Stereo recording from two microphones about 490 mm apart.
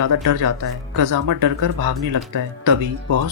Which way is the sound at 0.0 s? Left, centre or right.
Right.